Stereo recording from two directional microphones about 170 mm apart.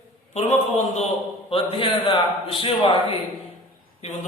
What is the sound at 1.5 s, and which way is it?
A man's voice, 30° left (ahead or behind).